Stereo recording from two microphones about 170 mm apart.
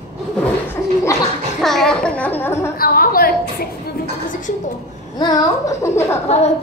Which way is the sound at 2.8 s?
60° left (ahead or behind).